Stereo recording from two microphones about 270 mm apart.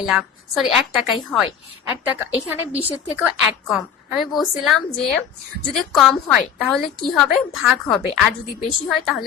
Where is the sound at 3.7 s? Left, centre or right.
Centre.